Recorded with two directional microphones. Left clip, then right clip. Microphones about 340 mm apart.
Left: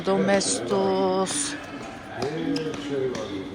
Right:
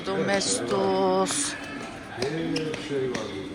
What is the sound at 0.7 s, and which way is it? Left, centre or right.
Music, centre.